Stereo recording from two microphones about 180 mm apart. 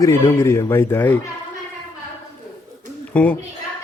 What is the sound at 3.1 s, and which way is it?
Speech, 10° left (ahead or behind).